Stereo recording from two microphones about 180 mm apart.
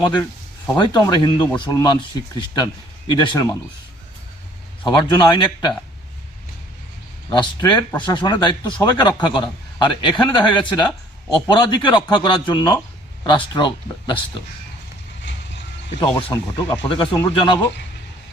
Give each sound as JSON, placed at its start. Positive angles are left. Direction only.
{"t": 0.8, "sound": "speech", "side_deg": 20}
{"t": 4.9, "sound": "speech", "side_deg": 25}
{"t": 7.3, "sound": "speech", "side_deg": 25}
{"t": 16.0, "sound": "speech", "side_deg": 25}
{"t": 16.9, "sound": "speech", "side_deg": 25}